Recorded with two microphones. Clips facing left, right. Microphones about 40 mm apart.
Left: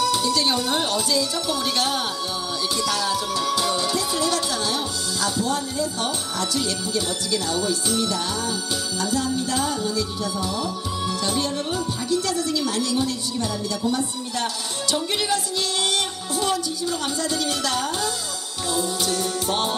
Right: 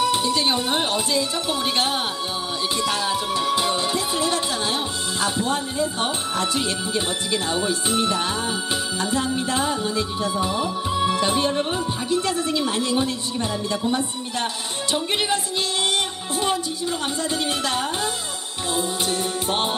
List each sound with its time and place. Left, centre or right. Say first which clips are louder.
0.0 s speech: right 1 dB; right
2.7 s music: right 1 dB; right